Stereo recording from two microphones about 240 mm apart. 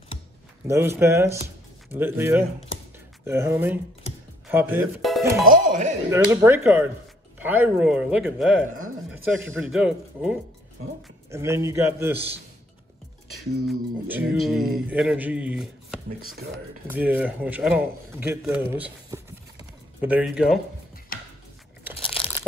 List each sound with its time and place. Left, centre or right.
0.7 s a man's voice: centre
5.5 s speech: right
6.0 s a man's voice: centre
8.7 s a sound: right
9.2 s a man's voice: centre
13.7 s a man's voice: centre